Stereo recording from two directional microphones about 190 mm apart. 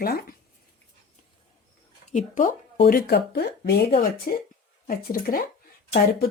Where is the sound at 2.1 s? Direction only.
45° left (ahead or behind).